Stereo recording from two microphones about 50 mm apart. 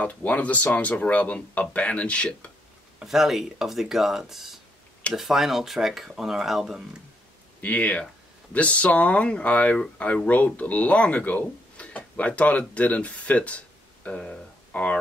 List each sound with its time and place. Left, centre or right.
0.0 s speech: left
3.0 s speech: centre
7.6 s speech: left